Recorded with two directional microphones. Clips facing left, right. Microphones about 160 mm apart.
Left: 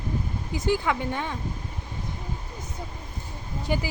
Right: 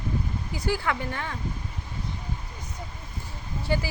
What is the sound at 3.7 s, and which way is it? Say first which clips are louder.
Speech: even; 15° left (ahead or behind).